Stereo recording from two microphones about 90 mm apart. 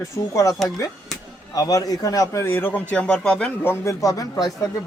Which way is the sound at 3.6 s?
30° left (ahead or behind).